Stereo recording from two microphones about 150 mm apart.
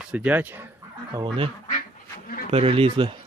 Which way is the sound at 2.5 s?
40° right (ahead or behind).